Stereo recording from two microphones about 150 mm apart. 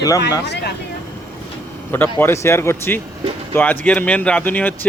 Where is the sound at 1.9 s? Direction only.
15° left (ahead or behind).